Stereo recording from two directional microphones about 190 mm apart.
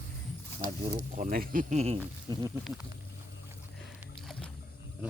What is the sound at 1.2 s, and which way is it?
Speech, 45° right (ahead or behind).